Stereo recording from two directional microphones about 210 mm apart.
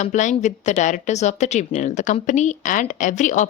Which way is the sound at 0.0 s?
35° left (ahead or behind).